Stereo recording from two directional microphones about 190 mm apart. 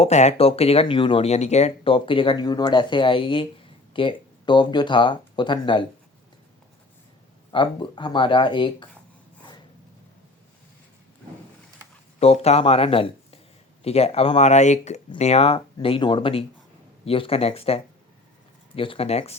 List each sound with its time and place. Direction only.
0.0 s speech: 35° left (ahead or behind)
7.5 s speech: 25° left (ahead or behind)
12.2 s speech: 35° left (ahead or behind)
18.8 s speech: 30° left (ahead or behind)